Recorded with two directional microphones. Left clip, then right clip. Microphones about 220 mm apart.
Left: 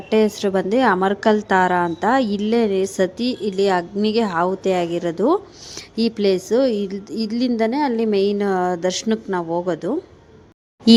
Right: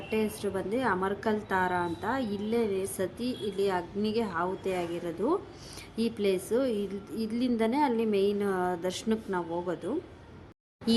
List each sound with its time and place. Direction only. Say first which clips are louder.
0.1 s a woman's voice: left 14 dB; 35° left (ahead or behind)